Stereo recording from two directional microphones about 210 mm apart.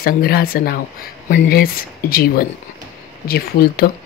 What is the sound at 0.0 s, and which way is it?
Speech, 45° left (ahead or behind).